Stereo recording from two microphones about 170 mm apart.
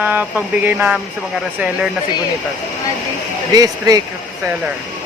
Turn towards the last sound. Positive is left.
turn(degrees=-20)  # may be behind; listen again after turning